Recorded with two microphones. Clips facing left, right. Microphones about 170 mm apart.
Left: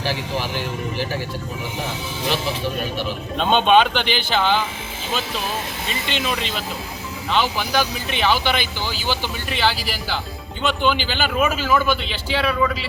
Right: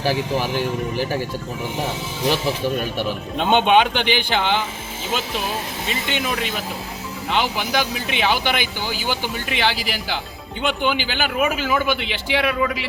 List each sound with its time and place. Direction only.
3.3 s speech: 15° right (ahead or behind)
6.1 s speech: 10° right (ahead or behind)